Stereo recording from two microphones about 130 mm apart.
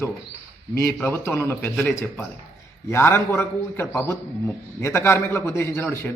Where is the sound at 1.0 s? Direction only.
15° left (ahead or behind).